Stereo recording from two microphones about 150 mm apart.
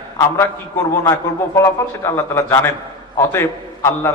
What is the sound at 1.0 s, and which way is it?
A man's voice, 20° left (ahead or behind).